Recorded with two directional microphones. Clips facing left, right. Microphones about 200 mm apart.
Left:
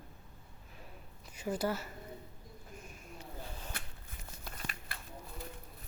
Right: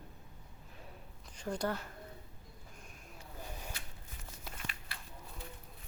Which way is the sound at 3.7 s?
55° left (ahead or behind).